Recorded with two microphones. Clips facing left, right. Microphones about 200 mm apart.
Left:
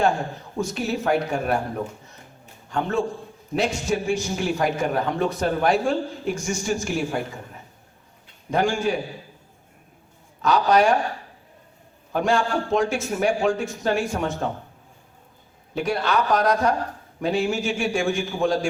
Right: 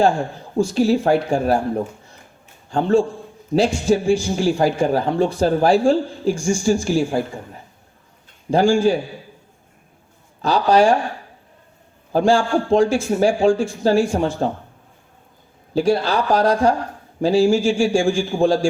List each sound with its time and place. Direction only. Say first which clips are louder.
0.0 s a man's voice: right 5 dB; 30° right (ahead or behind)
8.4 s a man's voice: right 7 dB; 30° right (ahead or behind)
10.4 s a man's voice: right 3 dB; 30° right (ahead or behind)
12.1 s a man's voice: right 6 dB; 30° right (ahead or behind)
15.7 s a man's voice: right 5 dB; 30° right (ahead or behind)